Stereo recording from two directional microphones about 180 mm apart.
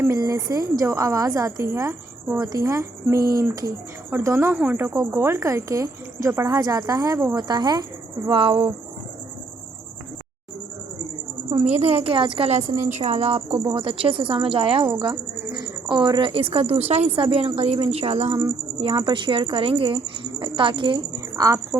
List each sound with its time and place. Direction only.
0.0 s speech: 20° right (ahead or behind)
11.6 s a woman's voice: 35° right (ahead or behind); by 21.8 s 20° right (ahead or behind)